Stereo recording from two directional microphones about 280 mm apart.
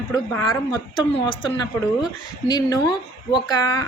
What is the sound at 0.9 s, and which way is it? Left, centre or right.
A woman's voice, centre.